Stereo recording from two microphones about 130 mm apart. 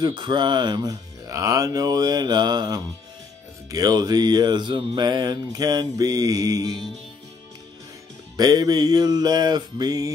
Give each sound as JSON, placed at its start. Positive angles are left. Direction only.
{"t": 0.0, "sound": "mantra", "side_deg": -35}
{"t": 8.4, "sound": "mantra", "side_deg": -30}